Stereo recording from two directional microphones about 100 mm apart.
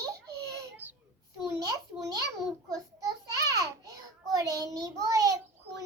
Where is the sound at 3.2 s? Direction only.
35° right (ahead or behind).